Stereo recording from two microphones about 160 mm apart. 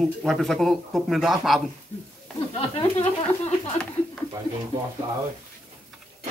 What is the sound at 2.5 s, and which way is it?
Speech, 40° left (ahead or behind).